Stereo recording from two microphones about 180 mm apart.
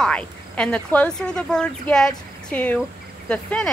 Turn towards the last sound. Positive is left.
turn(degrees=5)  # may be behind; listen again after turning